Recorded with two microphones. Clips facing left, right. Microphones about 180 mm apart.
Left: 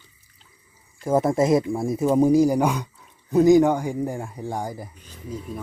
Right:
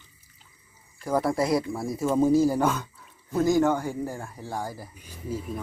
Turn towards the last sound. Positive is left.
turn(degrees=-5)  # may be behind; listen again after turning